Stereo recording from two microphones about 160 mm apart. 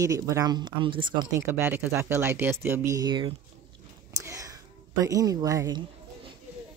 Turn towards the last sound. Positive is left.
turn(degrees=-20)  # may be behind; listen again after turning